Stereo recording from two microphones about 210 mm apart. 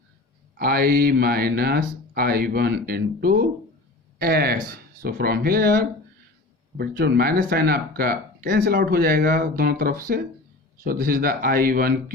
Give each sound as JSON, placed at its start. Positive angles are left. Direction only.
{"t": 0.6, "sound": "speech", "side_deg": -45}